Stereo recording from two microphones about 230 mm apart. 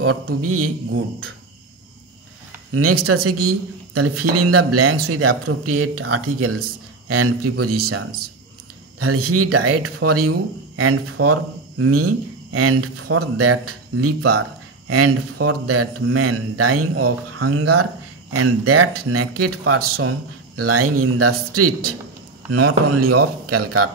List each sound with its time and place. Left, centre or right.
0.0 s a man's voice: right
2.7 s a man's voice: right
9.0 s a man's voice: right
22.5 s speech: right